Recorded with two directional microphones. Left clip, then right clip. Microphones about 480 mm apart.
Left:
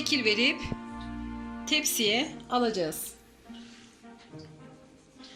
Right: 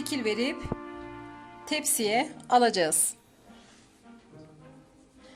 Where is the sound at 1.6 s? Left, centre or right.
Centre.